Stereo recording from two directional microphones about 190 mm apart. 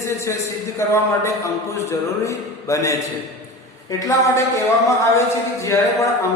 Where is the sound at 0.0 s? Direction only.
15° left (ahead or behind).